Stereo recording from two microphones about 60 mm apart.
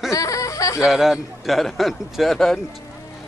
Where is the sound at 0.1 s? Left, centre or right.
Left.